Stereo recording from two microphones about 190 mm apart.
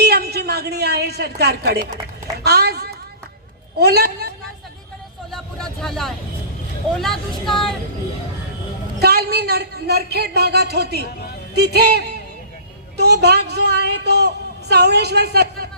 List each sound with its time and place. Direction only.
0.0 s a sound: 60° right (ahead or behind)
1.4 s a woman's voice: 60° right (ahead or behind)
5.3 s speech: centre (ahead or behind)
9.0 s a woman's voice: 55° right (ahead or behind)